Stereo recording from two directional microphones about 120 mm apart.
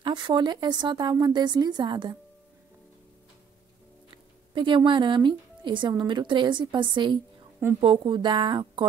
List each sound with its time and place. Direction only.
0.0 s speech: 40° right (ahead or behind)
4.6 s a woman's voice: 45° right (ahead or behind)